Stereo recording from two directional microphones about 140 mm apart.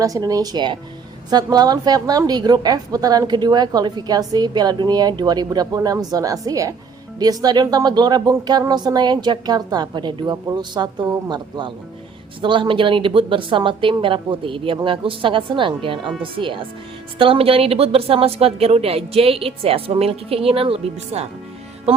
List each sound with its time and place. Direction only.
0.0 s a woman's voice: 25° right (ahead or behind); by 21.2 s 45° right (ahead or behind)